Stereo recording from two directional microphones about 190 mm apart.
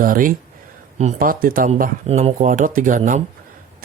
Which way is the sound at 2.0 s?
35° right (ahead or behind).